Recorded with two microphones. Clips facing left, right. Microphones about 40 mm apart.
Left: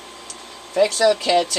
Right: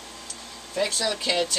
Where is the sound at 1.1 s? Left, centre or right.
Left.